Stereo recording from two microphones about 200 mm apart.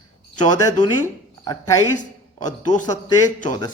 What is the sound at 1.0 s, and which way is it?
Speech, 15° left (ahead or behind).